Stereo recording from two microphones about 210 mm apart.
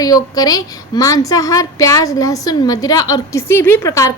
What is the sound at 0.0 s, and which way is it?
A woman's voice, 15° left (ahead or behind).